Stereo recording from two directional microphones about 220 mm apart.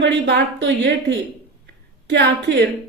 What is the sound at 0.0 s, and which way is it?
Speech, 55° right (ahead or behind).